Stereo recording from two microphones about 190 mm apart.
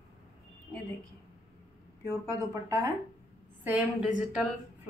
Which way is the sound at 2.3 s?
15° right (ahead or behind).